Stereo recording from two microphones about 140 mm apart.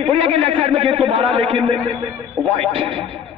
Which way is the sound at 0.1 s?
40° right (ahead or behind).